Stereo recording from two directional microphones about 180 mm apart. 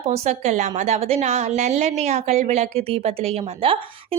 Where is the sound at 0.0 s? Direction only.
40° right (ahead or behind).